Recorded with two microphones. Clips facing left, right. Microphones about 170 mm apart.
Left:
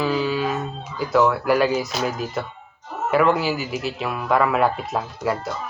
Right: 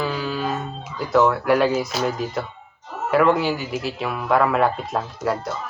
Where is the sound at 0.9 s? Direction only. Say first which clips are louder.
Right 1 dB; centre (ahead or behind).